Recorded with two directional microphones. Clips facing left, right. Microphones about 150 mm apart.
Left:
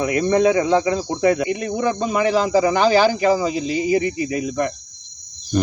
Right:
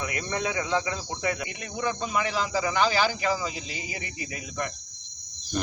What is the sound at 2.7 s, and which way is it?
Speech, 30° left (ahead or behind).